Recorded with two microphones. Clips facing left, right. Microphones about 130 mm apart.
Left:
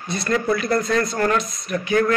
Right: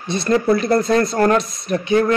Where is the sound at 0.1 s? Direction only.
25° right (ahead or behind).